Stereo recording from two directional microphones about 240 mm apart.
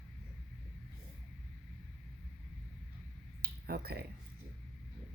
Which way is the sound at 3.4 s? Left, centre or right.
Right.